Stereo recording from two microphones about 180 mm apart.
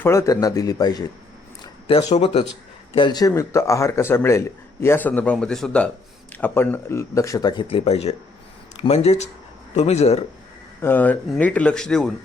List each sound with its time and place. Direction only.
0.0 s a man's voice: 15° left (ahead or behind)
1.6 s a sound: 20° left (ahead or behind)
2.1 s speech: 40° left (ahead or behind)
2.9 s a man's voice: 25° left (ahead or behind)
10.8 s speech: 10° left (ahead or behind)